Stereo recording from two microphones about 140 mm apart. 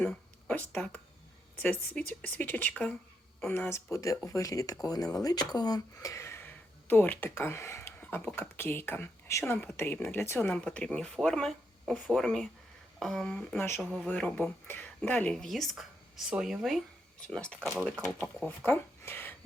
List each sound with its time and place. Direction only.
0.0 s speech: 10° left (ahead or behind)
13.7 s a woman's voice: 15° left (ahead or behind)